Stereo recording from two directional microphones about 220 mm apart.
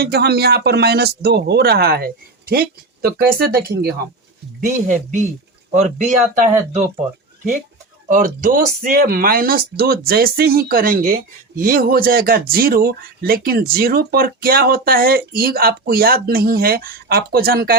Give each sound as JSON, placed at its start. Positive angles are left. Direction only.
{"t": 0.0, "sound": "speech", "side_deg": -45}
{"t": 4.9, "sound": "speech", "side_deg": -35}
{"t": 8.0, "sound": "speech", "side_deg": -35}